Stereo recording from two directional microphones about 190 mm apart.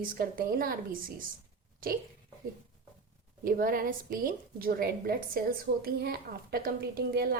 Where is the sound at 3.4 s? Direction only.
50° right (ahead or behind).